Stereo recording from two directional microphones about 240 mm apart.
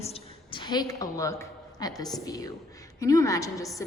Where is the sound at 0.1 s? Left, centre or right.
Centre.